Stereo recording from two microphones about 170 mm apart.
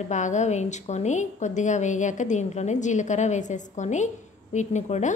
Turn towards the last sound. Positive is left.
turn(degrees=40)  # may be behind; listen again after turning